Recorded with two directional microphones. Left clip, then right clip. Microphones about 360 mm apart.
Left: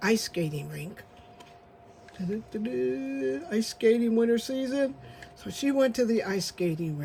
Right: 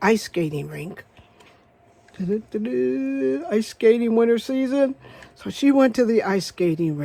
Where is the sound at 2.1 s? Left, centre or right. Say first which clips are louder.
Right 9 dB; centre.